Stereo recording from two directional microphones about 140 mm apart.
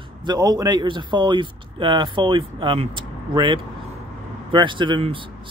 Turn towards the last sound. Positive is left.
turn(degrees=-35)  # may be behind; listen again after turning